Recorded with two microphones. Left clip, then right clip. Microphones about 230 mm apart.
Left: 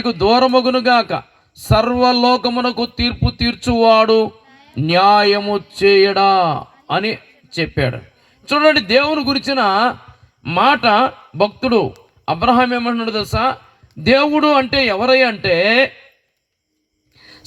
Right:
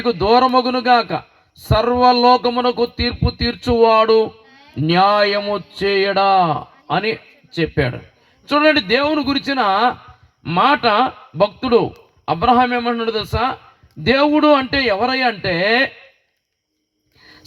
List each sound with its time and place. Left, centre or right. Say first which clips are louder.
0.0 s a man's voice: even; left
4.4 s a sound: even; right
4.7 s a man's voice: left 3 dB; left